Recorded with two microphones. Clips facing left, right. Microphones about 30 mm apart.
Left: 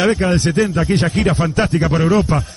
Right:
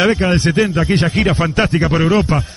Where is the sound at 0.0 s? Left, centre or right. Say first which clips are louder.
Right 1 dB; centre.